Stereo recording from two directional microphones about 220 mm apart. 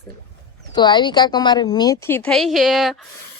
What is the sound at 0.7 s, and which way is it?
A woman's voice, 20° left (ahead or behind).